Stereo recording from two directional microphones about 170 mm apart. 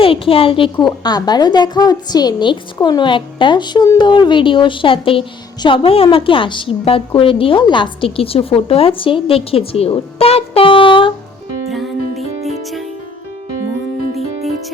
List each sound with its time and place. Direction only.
0.0 s a woman's voice: 35° left (ahead or behind)
11.7 s music: centre (ahead or behind)